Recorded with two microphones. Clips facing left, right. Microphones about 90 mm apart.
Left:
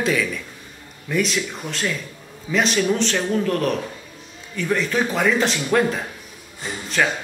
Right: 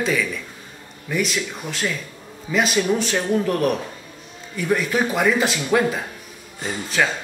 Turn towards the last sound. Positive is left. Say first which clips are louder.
# even
turn(degrees=-5)  # may be behind; listen again after turning